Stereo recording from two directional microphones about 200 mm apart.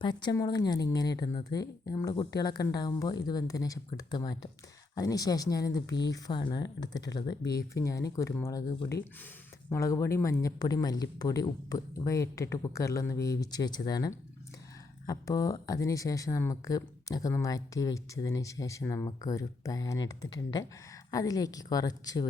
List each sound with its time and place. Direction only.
0.0 s speech: 20° left (ahead or behind)